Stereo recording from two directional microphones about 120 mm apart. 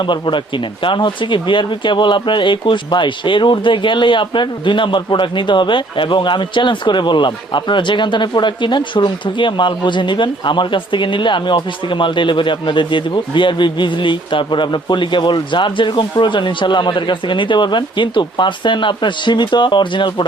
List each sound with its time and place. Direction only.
0.0 s speech: 40° left (ahead or behind)